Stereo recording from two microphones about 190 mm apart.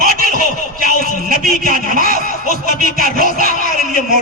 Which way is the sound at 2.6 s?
50° right (ahead or behind).